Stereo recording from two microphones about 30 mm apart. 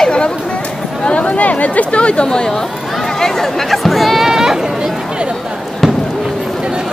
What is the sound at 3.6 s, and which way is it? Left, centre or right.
Speech, centre.